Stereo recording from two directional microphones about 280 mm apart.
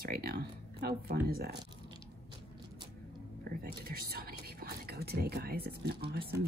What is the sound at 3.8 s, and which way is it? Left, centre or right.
Speech, right.